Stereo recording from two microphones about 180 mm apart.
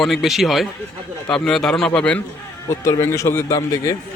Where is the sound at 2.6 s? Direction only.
15° left (ahead or behind).